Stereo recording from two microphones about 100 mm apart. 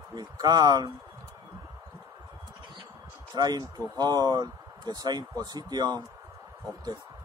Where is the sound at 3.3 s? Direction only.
45° right (ahead or behind).